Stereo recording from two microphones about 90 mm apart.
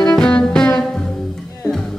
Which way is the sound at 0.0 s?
10° left (ahead or behind).